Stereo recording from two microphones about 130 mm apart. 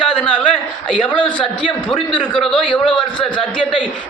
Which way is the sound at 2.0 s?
5° left (ahead or behind).